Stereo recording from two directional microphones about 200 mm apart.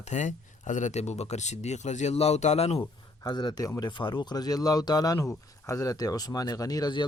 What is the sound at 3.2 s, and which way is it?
A man's voice, 20° left (ahead or behind).